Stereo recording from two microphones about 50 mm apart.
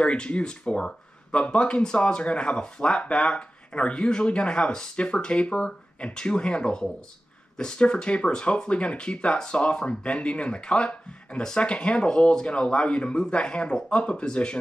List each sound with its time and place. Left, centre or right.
0.0 s speech: left